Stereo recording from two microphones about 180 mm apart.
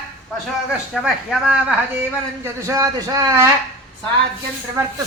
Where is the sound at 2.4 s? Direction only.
20° right (ahead or behind).